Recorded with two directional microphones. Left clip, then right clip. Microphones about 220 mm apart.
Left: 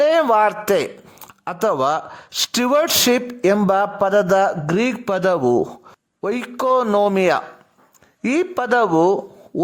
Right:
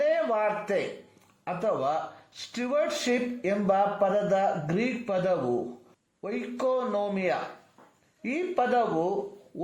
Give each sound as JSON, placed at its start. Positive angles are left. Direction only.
{"t": 0.0, "sound": "speech", "side_deg": 45}